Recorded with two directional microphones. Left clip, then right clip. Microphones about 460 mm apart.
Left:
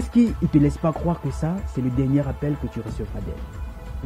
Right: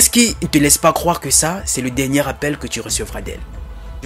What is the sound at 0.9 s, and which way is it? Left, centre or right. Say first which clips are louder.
Speech: right 11 dB; centre.